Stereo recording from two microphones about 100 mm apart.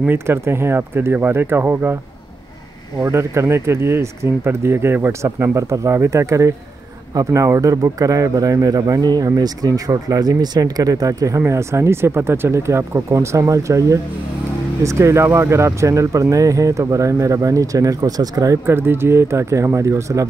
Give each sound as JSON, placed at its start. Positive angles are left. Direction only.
{"t": 0.0, "sound": "speech", "side_deg": -20}
{"t": 3.0, "sound": "speech", "side_deg": -25}
{"t": 18.7, "sound": "speech", "side_deg": -25}